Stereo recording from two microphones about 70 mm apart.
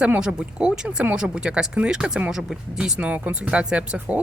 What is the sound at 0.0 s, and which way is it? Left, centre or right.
Speech, centre.